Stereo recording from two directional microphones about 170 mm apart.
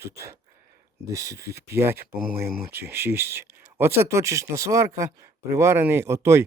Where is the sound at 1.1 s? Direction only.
20° right (ahead or behind).